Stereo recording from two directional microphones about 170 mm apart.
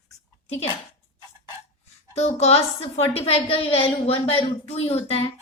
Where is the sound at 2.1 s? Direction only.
40° left (ahead or behind).